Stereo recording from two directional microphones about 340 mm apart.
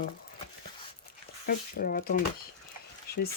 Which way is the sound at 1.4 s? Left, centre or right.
Left.